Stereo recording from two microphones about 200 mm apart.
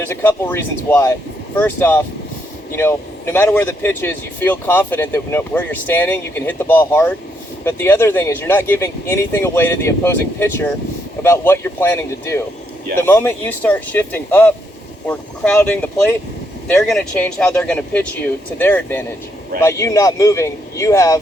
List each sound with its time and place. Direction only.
0.1 s speech: 10° left (ahead or behind)